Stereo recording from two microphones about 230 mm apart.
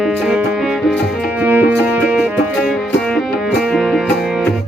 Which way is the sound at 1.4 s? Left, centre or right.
Centre.